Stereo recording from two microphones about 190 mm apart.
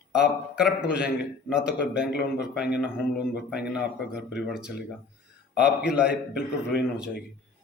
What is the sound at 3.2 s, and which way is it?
Speech, 60° left (ahead or behind).